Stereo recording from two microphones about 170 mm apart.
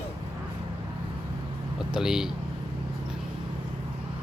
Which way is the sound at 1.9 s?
5° right (ahead or behind).